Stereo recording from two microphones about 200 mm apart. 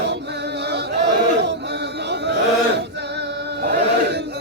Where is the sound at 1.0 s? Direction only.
60° right (ahead or behind).